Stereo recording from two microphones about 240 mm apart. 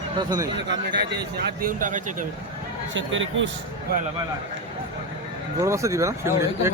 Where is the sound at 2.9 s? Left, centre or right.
Right.